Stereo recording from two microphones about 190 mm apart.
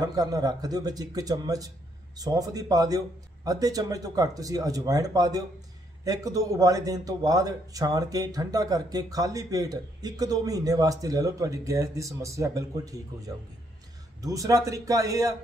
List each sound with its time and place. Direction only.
0.0 s a man's voice: 20° right (ahead or behind)